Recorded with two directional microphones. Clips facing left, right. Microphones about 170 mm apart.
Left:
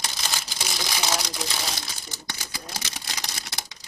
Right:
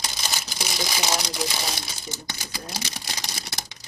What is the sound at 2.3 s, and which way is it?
Speech, 20° right (ahead or behind).